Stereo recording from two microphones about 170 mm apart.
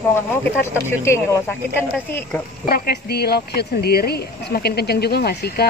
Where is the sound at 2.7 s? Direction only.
70° left (ahead or behind).